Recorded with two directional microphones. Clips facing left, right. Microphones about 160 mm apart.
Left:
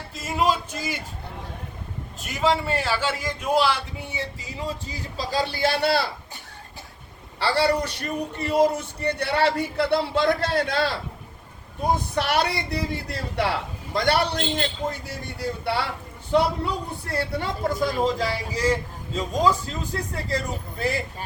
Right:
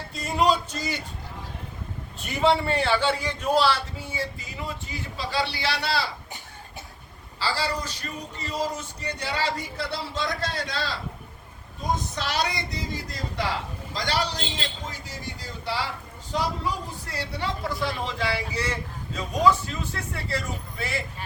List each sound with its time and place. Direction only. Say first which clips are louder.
0.2 s a sound: right 1 dB; 5° left (ahead or behind)
2.2 s a man's voice: right 1 dB; centre (ahead or behind); by 6.1 s 55° left (ahead or behind)
7.3 s a woman's voice: left 7 dB; 60° left (ahead or behind); by 21.2 s 40° left (ahead or behind)